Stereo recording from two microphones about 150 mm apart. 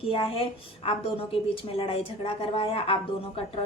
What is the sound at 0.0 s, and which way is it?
A woman's voice, 35° left (ahead or behind).